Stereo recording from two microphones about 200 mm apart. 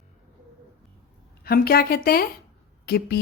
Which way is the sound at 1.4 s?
50° left (ahead or behind).